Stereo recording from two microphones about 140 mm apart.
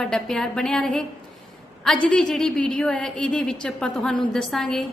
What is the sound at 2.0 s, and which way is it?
A woman's voice, 5° left (ahead or behind).